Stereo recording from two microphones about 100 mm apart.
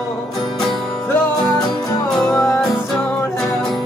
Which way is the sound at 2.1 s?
5° left (ahead or behind).